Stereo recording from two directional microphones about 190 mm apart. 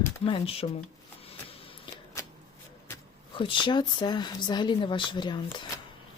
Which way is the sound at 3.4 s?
25° left (ahead or behind).